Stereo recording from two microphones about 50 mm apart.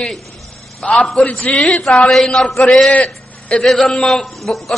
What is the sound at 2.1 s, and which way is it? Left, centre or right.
A man's voice, centre.